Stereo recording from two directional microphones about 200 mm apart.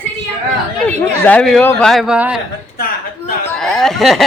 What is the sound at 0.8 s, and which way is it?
Speech, 10° left (ahead or behind).